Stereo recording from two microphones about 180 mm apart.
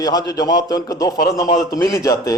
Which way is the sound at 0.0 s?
20° left (ahead or behind).